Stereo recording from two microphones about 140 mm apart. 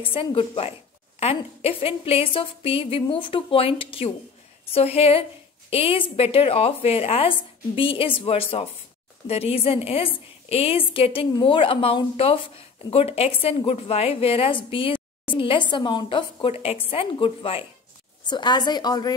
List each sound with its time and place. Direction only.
0.0 s speech: 40° left (ahead or behind)